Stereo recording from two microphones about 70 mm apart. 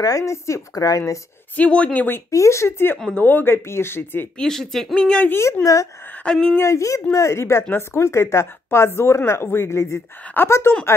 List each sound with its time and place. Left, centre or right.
0.0 s speech: left
0.7 s speech: left
1.6 s speech: centre
2.3 s speech: left
3.2 s speech: left
4.4 s speech: centre
5.3 s speech: left
6.2 s speech: centre
6.6 s speech: left
10.4 s speech: left